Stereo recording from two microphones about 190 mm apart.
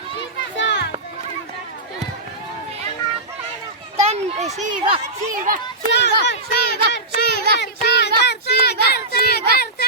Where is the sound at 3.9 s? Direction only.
35° right (ahead or behind).